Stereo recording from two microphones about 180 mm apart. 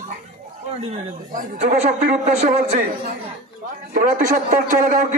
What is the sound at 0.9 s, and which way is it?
Speech, 50° right (ahead or behind).